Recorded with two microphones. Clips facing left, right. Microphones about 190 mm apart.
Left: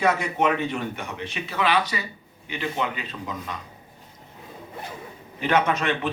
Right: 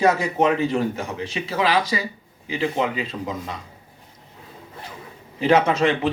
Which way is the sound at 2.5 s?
30° right (ahead or behind).